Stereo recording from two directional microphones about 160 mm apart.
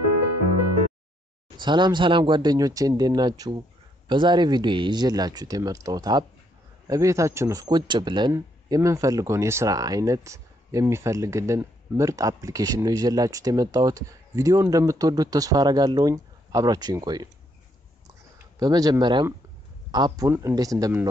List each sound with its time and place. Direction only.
1.6 s speech: 30° right (ahead or behind)
18.6 s speech: 25° right (ahead or behind)